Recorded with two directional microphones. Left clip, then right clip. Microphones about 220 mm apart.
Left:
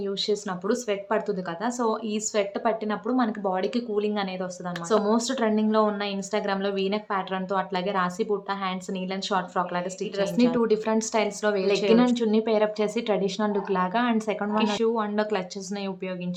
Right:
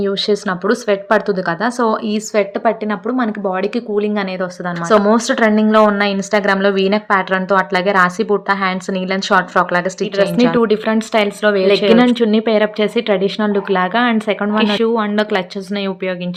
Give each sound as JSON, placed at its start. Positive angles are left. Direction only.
{"t": 0.0, "sound": "a woman's voice", "side_deg": -25}